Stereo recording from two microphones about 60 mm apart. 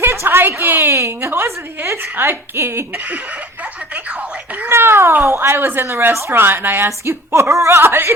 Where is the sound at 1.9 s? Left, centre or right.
Right.